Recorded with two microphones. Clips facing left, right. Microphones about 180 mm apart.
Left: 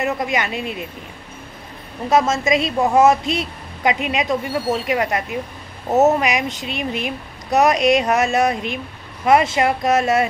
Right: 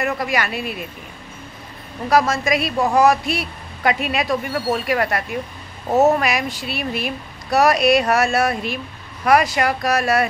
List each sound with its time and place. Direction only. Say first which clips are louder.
0.0 s a woman's voice: left 1 dB; 20° left (ahead or behind)
2.0 s a woman's voice: left 1 dB; 20° left (ahead or behind)